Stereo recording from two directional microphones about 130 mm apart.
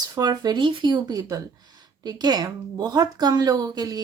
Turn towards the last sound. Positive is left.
turn(degrees=-30)  # may be behind; listen again after turning